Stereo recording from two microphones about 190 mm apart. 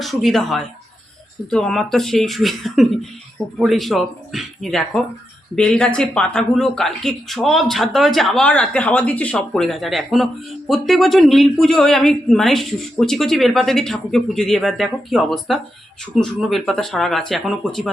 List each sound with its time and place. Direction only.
0.0 s speech: centre (ahead or behind)